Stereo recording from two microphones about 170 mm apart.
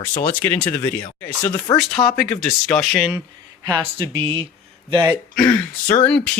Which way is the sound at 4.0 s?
30° right (ahead or behind).